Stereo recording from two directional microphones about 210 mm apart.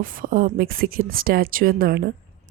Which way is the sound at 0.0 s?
40° right (ahead or behind).